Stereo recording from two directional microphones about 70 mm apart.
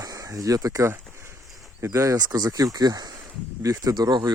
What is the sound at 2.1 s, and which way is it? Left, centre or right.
Speech, right.